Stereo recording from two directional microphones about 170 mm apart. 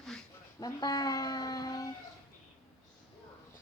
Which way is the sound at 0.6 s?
20° left (ahead or behind).